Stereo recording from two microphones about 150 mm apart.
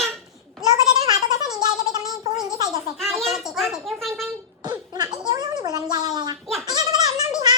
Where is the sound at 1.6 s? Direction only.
25° right (ahead or behind).